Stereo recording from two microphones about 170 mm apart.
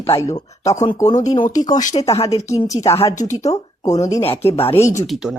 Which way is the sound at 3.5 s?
40° left (ahead or behind).